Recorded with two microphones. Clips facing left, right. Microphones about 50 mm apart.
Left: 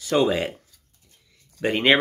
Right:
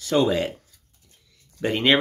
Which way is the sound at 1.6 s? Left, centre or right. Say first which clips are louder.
Left 1 dB; centre.